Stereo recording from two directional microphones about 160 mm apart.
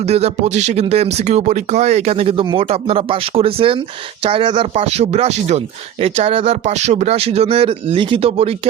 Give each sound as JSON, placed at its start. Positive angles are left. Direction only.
{"t": 0.1, "sound": "speech", "side_deg": -45}